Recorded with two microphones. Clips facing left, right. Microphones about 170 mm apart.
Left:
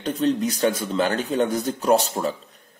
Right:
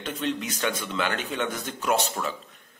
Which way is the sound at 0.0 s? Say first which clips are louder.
Left 8 dB; 40° left (ahead or behind).